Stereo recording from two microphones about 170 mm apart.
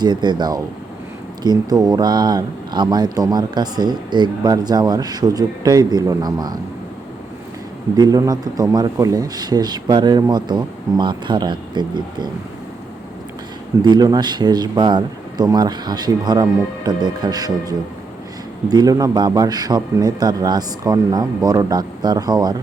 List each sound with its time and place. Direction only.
0.0 s speech: 25° right (ahead or behind)
7.9 s speech: 20° right (ahead or behind)
13.8 s speech: 25° right (ahead or behind)